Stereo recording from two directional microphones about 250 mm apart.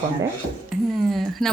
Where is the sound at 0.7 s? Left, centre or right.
Centre.